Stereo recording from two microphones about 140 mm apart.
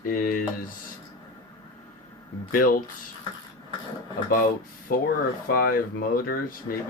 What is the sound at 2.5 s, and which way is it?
Speech, 90° left.